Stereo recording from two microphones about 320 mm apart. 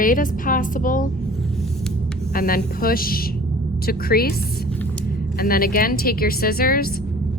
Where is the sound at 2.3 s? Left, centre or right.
Left.